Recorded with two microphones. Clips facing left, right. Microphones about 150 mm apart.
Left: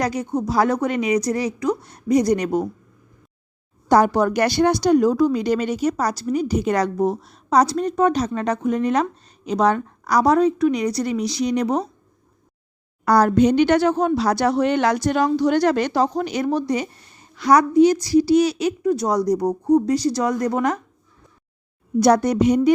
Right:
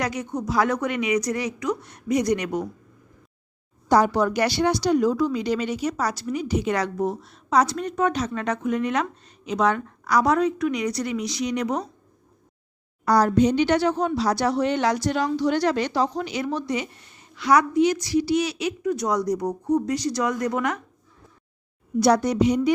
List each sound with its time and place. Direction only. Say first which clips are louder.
0.0 s speech: left 5 dB; 35° left (ahead or behind)
3.8 s speech: left 3 dB; 55° left (ahead or behind); by 11.9 s 35° left (ahead or behind)
13.1 s speech: left 3 dB; 55° left (ahead or behind); by 20.8 s 35° left (ahead or behind)
22.0 s speech: left 3 dB; 50° left (ahead or behind)